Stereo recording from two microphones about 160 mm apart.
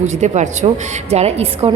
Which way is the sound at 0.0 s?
45° right (ahead or behind).